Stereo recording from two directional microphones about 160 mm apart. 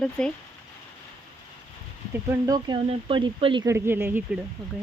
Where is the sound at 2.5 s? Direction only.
30° right (ahead or behind).